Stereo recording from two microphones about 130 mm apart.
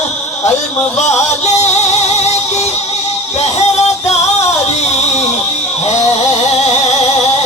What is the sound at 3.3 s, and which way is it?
Music, 60° left (ahead or behind).